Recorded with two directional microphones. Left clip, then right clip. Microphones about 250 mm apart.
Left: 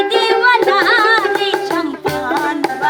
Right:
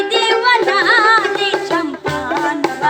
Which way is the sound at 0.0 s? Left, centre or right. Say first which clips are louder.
Left 1 dB; centre.